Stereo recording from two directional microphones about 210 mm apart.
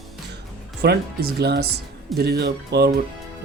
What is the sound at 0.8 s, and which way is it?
Speech, 50° right (ahead or behind).